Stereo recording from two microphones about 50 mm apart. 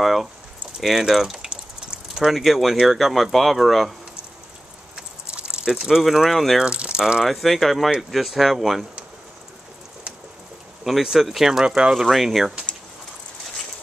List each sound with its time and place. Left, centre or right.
0.0 s speech: centre
1.5 s a sound: centre
2.2 s speech: centre
4.9 s a sound: centre
5.7 s speech: centre
6.6 s speech: right
7.2 s speech: centre
10.8 s speech: centre
11.6 s speech: centre
11.9 s speech: centre